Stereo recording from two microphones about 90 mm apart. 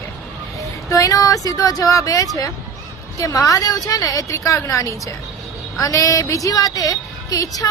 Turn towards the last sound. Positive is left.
turn(degrees=40)  # may be behind; listen again after turning